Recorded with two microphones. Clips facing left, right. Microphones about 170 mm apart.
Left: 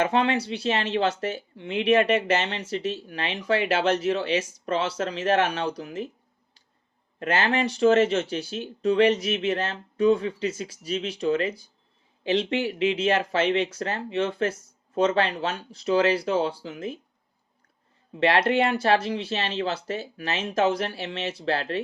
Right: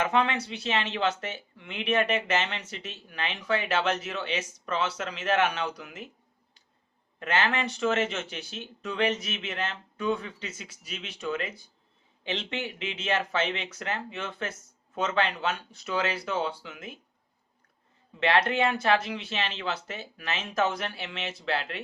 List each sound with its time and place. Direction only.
0.0 s speech: 35° left (ahead or behind)
7.2 s speech: 35° left (ahead or behind)
18.2 s speech: 35° left (ahead or behind)